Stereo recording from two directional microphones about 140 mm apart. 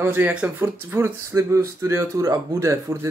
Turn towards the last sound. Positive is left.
turn(degrees=-20)  # may be behind; listen again after turning